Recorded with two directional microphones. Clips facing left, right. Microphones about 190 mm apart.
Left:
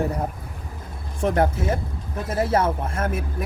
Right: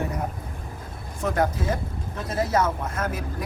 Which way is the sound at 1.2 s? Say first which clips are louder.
Left 3 dB; 30° left (ahead or behind).